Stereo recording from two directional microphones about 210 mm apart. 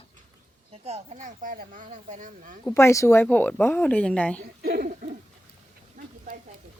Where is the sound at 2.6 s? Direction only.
15° left (ahead or behind).